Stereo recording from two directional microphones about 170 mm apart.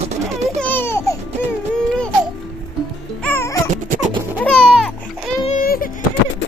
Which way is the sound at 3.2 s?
10° left (ahead or behind).